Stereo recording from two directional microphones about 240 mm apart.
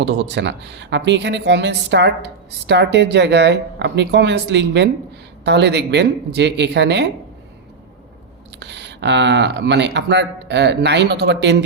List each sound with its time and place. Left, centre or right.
0.0 s a woman's voice: right
8.5 s a woman's voice: right